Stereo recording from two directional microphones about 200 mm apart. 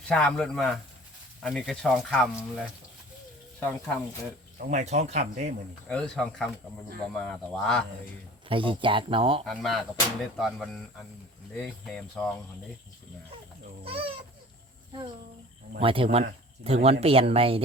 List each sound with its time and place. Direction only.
0.1 s speech: 5° left (ahead or behind)
3.6 s speech: 10° left (ahead or behind)
4.5 s speech: 35° right (ahead or behind)
5.9 s speech: 5° left (ahead or behind)
8.4 s speech: 25° right (ahead or behind)
9.5 s speech: centre (ahead or behind)
13.8 s a sound: 30° right (ahead or behind)
15.8 s speech: 25° right (ahead or behind)